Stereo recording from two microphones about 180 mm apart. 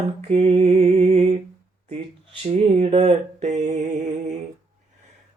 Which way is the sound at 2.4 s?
30° right (ahead or behind).